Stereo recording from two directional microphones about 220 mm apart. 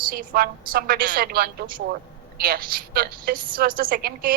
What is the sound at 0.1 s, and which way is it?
A woman's voice, 40° right (ahead or behind).